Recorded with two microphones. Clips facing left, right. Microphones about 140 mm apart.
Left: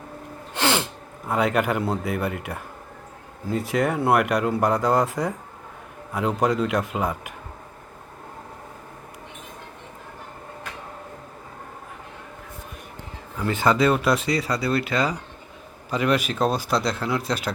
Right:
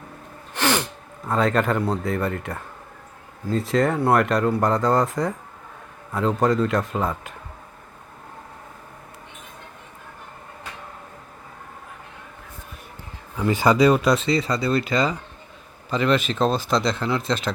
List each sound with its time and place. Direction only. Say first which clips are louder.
0.5 s sneeze: right 1 dB; 15° left (ahead or behind)
1.3 s speech: right 1 dB; 15° left (ahead or behind)
3.7 s speech: right 2 dB; 5° left (ahead or behind)
4.9 s speech: right 1 dB; 5° left (ahead or behind)
6.1 s speech: right 2 dB; 15° left (ahead or behind)
13.4 s speech: right 3 dB; 5° right (ahead or behind)